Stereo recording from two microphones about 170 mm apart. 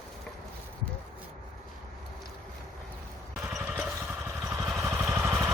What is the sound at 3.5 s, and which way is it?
Vehicle, 5° right (ahead or behind).